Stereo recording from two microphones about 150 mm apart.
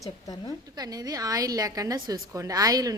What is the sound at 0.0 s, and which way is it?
Speech, 25° left (ahead or behind).